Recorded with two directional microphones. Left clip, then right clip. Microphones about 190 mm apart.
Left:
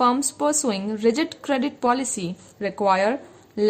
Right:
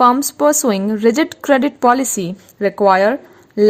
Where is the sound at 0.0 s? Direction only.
35° right (ahead or behind).